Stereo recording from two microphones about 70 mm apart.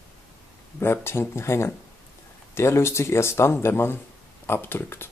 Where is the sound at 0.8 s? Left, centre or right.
Left.